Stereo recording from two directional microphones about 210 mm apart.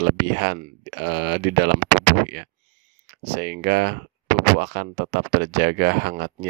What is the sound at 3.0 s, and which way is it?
Speech, 50° right (ahead or behind).